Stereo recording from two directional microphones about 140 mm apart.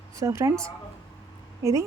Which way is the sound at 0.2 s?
20° right (ahead or behind).